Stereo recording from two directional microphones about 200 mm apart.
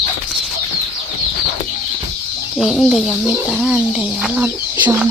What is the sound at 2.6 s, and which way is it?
Speech, centre (ahead or behind).